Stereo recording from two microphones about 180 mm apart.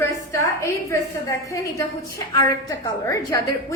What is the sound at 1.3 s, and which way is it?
A woman's voice, 15° left (ahead or behind).